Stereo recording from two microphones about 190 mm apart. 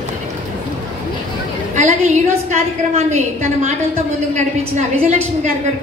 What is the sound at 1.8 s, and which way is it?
A woman's voice, 35° right (ahead or behind).